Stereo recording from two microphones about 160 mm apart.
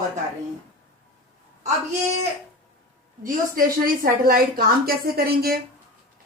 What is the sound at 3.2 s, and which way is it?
A woman's voice, 60° right (ahead or behind).